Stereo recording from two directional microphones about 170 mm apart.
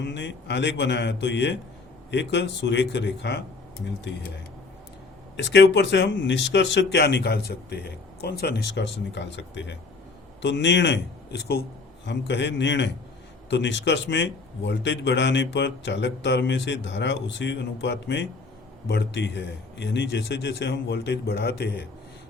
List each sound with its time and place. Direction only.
0.0 s a man's voice: 90° left
5.4 s a man's voice: 90° left; by 11.6 s 70° left (ahead or behind)
12.0 s a man's voice: 90° left; by 21.8 s 75° left (ahead or behind)